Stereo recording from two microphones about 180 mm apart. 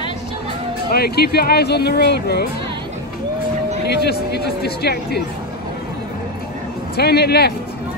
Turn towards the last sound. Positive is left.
turn(degrees=65)  # may be behind; listen again after turning